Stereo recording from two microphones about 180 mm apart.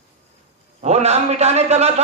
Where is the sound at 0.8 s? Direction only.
35° right (ahead or behind).